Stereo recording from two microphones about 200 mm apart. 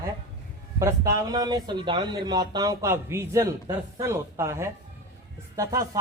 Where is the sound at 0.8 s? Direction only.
15° right (ahead or behind).